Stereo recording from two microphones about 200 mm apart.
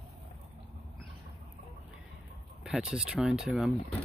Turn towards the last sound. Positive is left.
turn(degrees=0)  # may be behind; listen again after turning